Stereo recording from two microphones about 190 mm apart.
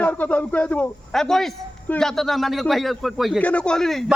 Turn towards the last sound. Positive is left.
turn(degrees=0)  # may be behind; listen again after turning